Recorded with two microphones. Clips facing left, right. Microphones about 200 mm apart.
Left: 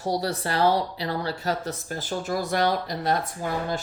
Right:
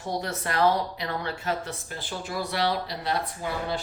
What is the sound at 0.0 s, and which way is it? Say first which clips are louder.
Speech: left 4 dB; 35° left (ahead or behind).